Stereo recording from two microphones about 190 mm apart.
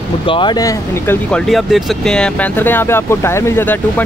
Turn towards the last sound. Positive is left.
turn(degrees=10)  # may be behind; listen again after turning